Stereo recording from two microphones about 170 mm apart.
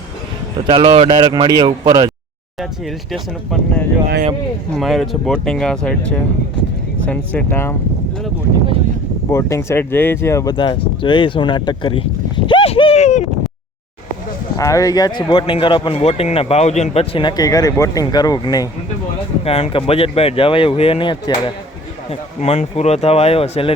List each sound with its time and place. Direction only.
0.7 s speech: 30° right (ahead or behind)
3.1 s speech: centre (ahead or behind)
9.3 s speech: 15° left (ahead or behind)
12.5 s a sound: 30° left (ahead or behind)
14.6 s speech: 20° left (ahead or behind)
19.5 s speech: 35° left (ahead or behind)